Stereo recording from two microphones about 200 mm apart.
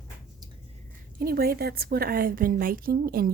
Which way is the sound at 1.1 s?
50° right (ahead or behind).